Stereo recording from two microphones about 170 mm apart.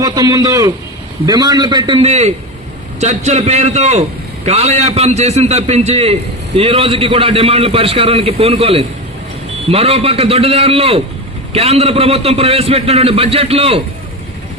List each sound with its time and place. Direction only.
0.0 s a man's voice: 20° right (ahead or behind)
2.0 s a man's voice: 40° right (ahead or behind)